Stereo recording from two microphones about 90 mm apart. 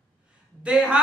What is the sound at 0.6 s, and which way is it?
Speech, 10° right (ahead or behind).